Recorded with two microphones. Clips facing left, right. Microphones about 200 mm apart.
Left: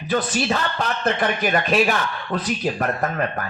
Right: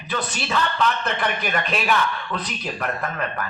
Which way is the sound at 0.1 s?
45° left (ahead or behind).